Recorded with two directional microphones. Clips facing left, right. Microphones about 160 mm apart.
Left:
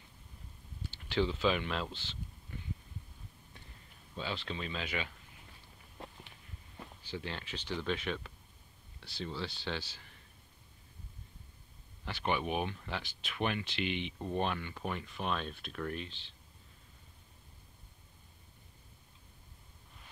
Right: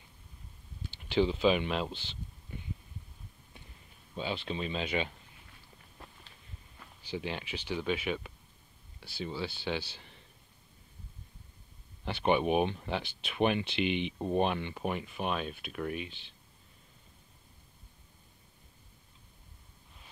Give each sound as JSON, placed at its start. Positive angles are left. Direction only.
{"t": 0.9, "sound": "speech", "side_deg": -15}
{"t": 4.1, "sound": "speech", "side_deg": -15}
{"t": 7.1, "sound": "speech", "side_deg": -15}
{"t": 12.0, "sound": "speech", "side_deg": -20}